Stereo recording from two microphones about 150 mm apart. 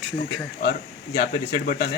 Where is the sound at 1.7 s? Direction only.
75° left (ahead or behind).